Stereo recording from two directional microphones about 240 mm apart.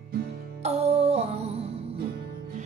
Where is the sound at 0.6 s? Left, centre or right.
Right.